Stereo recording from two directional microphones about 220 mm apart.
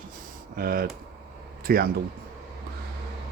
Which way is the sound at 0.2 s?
40° right (ahead or behind).